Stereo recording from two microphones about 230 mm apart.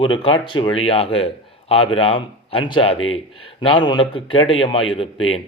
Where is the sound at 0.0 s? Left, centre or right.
Left.